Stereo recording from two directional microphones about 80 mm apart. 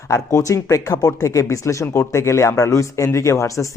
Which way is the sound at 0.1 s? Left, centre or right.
Left.